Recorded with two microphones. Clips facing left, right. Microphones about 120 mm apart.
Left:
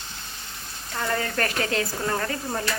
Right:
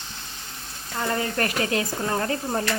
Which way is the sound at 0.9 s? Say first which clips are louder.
Right 1 dB; 20° right (ahead or behind).